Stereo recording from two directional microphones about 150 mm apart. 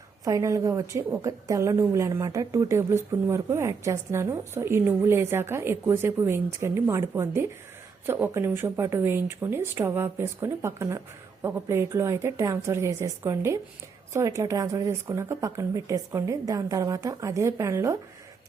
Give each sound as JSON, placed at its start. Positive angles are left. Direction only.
{"t": 0.3, "sound": "a woman's voice", "side_deg": -20}